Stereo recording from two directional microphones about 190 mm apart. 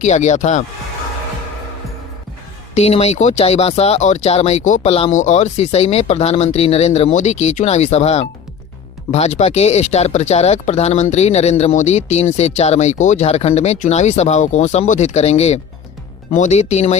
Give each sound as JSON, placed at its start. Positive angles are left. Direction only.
{"t": 0.0, "sound": "speech", "side_deg": 40}
{"t": 2.7, "sound": "speech", "side_deg": 35}